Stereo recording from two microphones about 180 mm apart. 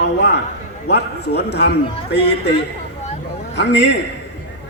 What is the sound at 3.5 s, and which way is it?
Speech, 70° left (ahead or behind).